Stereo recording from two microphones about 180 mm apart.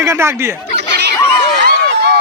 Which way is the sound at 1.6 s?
70° right (ahead or behind).